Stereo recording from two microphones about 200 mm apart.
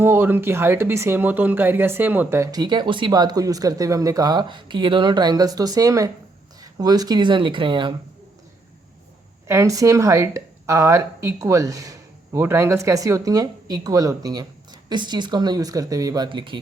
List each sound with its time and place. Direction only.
0.0 s a woman's voice: 10° right (ahead or behind)
9.5 s a woman's voice: 15° right (ahead or behind)